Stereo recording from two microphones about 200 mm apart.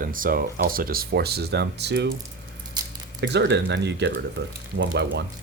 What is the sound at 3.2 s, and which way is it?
Speech, 65° right (ahead or behind).